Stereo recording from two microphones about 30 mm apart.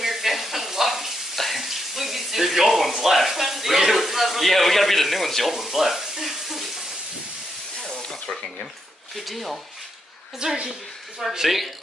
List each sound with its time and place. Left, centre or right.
0.0 s sizzle: centre
1.3 s a sound: centre
3.0 s speech: centre
5.5 s frying: centre
8.1 s snake: centre
9.1 s speech: centre
10.4 s a woman's voice: right
11.4 s speech: centre